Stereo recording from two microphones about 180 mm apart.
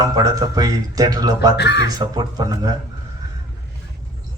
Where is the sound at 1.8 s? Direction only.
20° right (ahead or behind).